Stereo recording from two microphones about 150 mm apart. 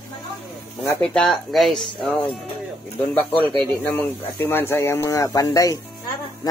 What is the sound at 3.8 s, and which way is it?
Speech, 15° left (ahead or behind).